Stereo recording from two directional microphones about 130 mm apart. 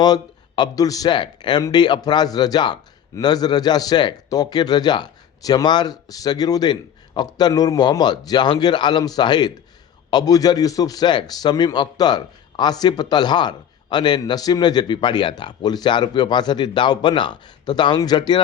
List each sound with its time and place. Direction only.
0.0 s a man's voice: 30° left (ahead or behind)